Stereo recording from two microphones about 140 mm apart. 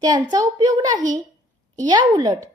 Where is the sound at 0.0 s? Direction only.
30° right (ahead or behind).